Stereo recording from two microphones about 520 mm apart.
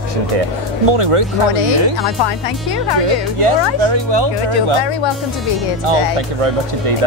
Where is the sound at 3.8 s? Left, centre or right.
Right.